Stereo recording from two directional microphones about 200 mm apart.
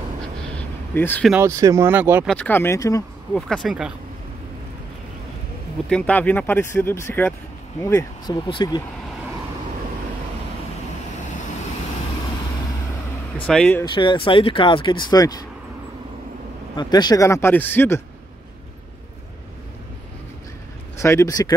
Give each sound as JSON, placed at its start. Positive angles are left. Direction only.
{"t": 0.2, "sound": "a sound", "side_deg": 10}
{"t": 1.3, "sound": "speech", "side_deg": -15}
{"t": 2.2, "sound": "speech", "side_deg": 5}
{"t": 3.3, "sound": "speech", "side_deg": 0}
{"t": 5.9, "sound": "speech", "side_deg": 5}
{"t": 13.5, "sound": "speech", "side_deg": 5}
{"t": 13.8, "sound": "speech", "side_deg": 25}
{"t": 16.7, "sound": "speech", "side_deg": 20}
{"t": 21.0, "sound": "speech", "side_deg": 15}